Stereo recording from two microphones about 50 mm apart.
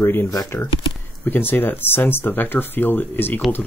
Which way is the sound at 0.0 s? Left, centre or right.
Left.